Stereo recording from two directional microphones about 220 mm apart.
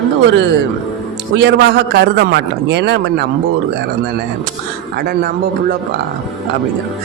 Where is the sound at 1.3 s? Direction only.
50° right (ahead or behind).